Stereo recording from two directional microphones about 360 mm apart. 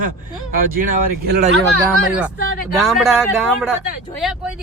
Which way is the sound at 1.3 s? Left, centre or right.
Right.